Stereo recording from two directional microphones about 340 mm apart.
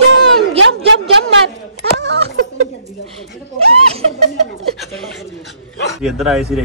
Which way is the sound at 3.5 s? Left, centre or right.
Centre.